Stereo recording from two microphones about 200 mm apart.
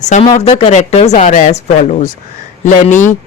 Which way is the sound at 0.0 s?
35° left (ahead or behind).